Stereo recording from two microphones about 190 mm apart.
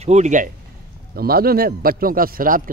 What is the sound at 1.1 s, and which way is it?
A man's voice, 50° right (ahead or behind).